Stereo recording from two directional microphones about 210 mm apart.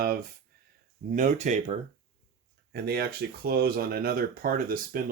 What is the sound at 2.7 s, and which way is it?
Speech, 50° right (ahead or behind).